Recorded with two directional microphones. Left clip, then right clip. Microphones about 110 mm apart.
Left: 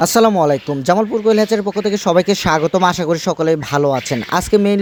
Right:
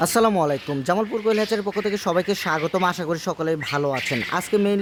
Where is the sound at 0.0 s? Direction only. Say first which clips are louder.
Left 7 dB; 45° left (ahead or behind).